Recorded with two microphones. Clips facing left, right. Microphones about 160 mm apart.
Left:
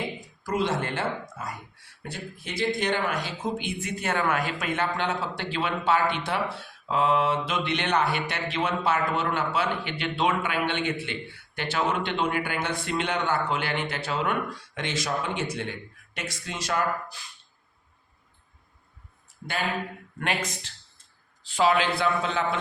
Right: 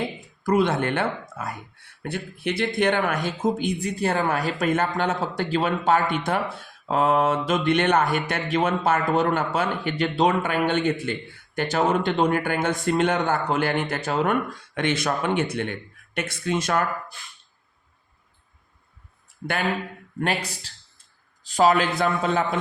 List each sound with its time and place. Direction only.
0.4 s speech: 55° right (ahead or behind)
20.1 s speech: 35° right (ahead or behind)